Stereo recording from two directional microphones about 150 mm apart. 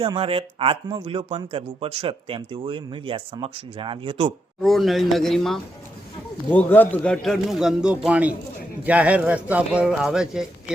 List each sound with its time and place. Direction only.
0.0 s speech: 35° right (ahead or behind)
4.6 s a man's voice: centre (ahead or behind)